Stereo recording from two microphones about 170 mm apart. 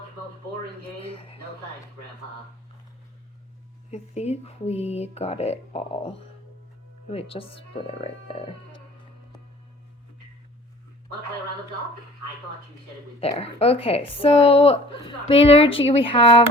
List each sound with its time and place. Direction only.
0.9 s a woman's voice: 35° left (ahead or behind)
3.9 s a woman's voice: 40° left (ahead or behind)
8.0 s a sound: 35° left (ahead or behind)
13.1 s a woman's voice: 35° left (ahead or behind)